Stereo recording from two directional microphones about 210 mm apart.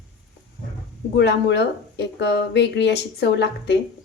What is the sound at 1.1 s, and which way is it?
A woman's voice, 55° left (ahead or behind).